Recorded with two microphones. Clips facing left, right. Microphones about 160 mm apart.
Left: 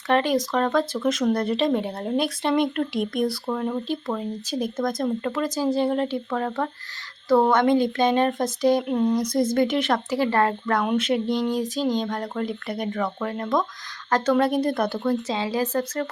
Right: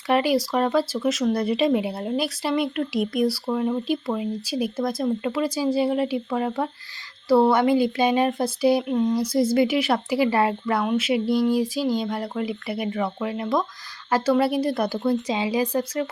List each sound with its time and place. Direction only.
0.1 s speech: 10° right (ahead or behind)
8.9 s a sound: 5° left (ahead or behind)
9.1 s speech: 5° right (ahead or behind)